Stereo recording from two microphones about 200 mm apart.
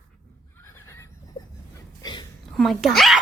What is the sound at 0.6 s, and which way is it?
Neigh, 15° left (ahead or behind).